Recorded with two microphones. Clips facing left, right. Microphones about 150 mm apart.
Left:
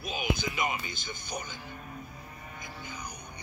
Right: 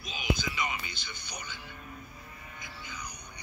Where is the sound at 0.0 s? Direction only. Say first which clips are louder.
Left 1 dB; 50° left (ahead or behind).